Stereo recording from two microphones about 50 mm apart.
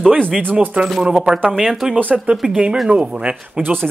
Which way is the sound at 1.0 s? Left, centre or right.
Centre.